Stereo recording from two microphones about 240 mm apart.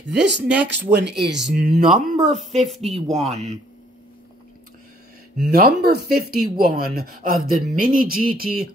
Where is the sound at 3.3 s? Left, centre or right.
Right.